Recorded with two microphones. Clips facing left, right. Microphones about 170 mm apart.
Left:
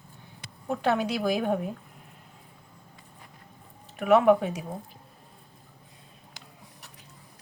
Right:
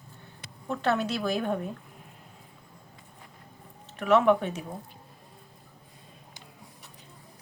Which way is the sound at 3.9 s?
10° left (ahead or behind).